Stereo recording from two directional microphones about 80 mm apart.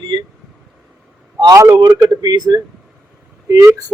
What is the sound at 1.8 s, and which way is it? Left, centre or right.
Speech, right.